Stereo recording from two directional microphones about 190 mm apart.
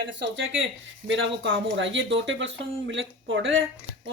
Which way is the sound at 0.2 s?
70° right (ahead or behind).